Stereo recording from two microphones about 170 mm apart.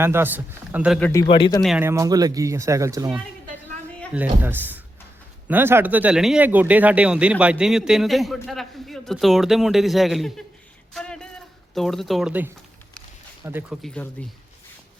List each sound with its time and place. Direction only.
0.0 s speech: 15° right (ahead or behind)
1.3 s speech: 30° left (ahead or behind)
1.8 s speech: 15° right (ahead or behind)
4.1 s a man's voice: 10° right (ahead or behind)
13.8 s speech: 5° left (ahead or behind)